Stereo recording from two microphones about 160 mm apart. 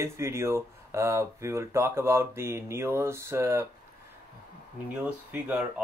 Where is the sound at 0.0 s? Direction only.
15° right (ahead or behind).